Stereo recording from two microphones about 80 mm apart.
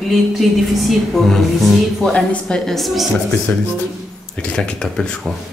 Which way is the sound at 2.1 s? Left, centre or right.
Centre.